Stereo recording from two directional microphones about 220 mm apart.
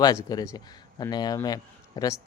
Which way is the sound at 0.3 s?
15° left (ahead or behind).